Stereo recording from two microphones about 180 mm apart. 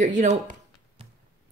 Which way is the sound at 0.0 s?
40° right (ahead or behind).